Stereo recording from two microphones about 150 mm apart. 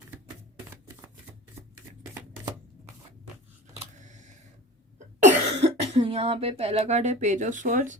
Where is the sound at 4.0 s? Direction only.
55° right (ahead or behind).